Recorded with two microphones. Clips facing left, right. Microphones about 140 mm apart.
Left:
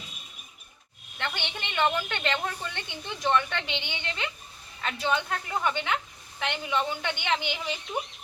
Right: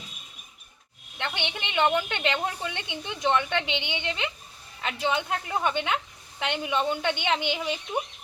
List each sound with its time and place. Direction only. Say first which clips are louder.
1.2 s a woman's voice: right 2 dB; 15° right (ahead or behind)